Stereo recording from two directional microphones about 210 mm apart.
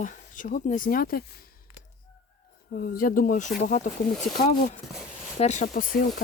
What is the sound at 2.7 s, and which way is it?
Speech, 50° left (ahead or behind).